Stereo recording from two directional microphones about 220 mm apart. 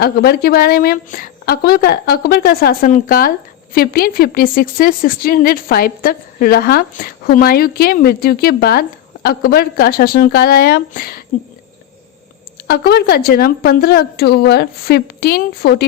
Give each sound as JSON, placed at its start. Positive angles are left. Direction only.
{"t": 0.0, "sound": "a woman's voice", "side_deg": 45}
{"t": 12.6, "sound": "a woman's voice", "side_deg": 45}